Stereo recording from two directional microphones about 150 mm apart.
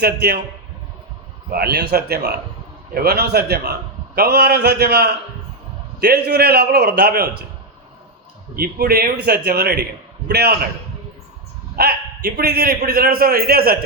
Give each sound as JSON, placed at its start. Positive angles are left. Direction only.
{"t": 0.0, "sound": "a man's voice", "side_deg": -90}
{"t": 1.5, "sound": "a man's voice", "side_deg": -90}
{"t": 8.5, "sound": "a man's voice", "side_deg": -90}
{"t": 11.8, "sound": "a man's voice", "side_deg": -90}